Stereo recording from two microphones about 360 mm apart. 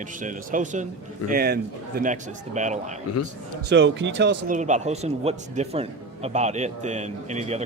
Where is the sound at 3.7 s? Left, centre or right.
Right.